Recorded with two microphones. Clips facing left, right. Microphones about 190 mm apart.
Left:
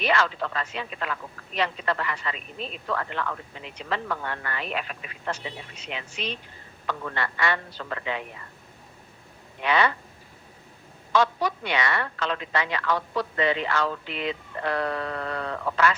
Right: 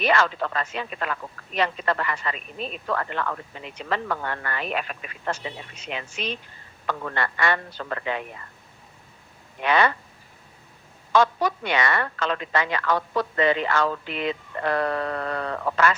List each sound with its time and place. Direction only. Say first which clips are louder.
0.0 s speech: right 2 dB; 45° right (ahead or behind)
9.6 s speech: right 2 dB; 50° right (ahead or behind)
11.1 s speech: right 3 dB; 45° right (ahead or behind)